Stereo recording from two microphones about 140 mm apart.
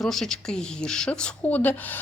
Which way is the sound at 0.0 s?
5° left (ahead or behind).